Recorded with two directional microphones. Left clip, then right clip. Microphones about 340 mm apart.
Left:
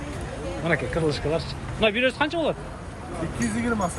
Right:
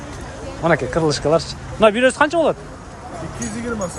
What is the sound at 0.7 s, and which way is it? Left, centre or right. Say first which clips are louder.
Speech: right 7 dB; centre.